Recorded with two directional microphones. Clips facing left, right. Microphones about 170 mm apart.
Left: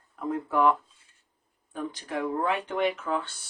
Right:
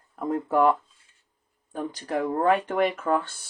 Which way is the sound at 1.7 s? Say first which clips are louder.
Right 4 dB; 40° right (ahead or behind).